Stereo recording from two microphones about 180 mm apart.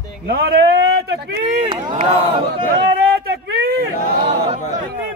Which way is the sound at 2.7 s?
65° right (ahead or behind).